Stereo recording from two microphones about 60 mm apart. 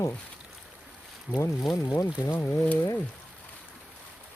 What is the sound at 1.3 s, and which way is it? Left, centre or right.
Speech, left.